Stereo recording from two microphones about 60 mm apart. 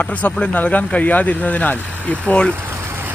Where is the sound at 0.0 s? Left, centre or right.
Left.